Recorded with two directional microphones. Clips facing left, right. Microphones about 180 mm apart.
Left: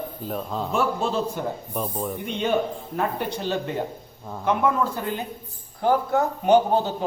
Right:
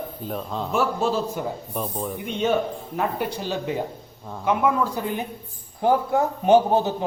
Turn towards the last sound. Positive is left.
turn(degrees=-20)  # may be behind; listen again after turning